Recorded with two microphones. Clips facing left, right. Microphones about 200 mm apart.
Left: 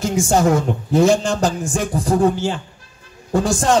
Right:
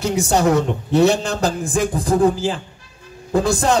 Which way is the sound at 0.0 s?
40° right (ahead or behind).